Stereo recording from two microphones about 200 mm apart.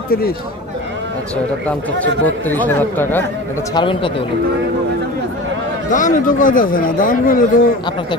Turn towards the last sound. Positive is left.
turn(degrees=45)  # may be behind; listen again after turning